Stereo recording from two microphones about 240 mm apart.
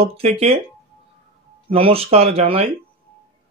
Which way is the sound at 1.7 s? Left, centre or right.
Right.